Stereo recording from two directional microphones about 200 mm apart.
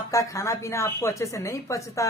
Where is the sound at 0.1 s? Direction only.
15° left (ahead or behind).